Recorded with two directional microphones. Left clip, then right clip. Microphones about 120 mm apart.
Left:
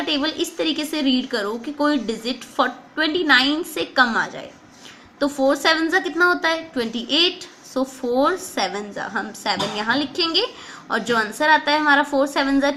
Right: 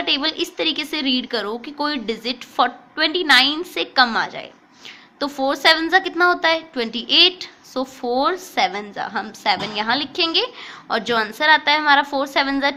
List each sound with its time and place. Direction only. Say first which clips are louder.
0.0 s a woman's voice: right 2 dB; 15° right (ahead or behind)